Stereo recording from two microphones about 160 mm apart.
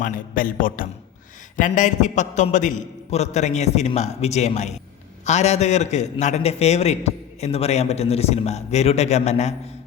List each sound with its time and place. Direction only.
0.0 s a man's voice: 55° left (ahead or behind)